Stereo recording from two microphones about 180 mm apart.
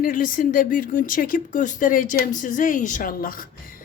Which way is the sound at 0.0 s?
50° left (ahead or behind).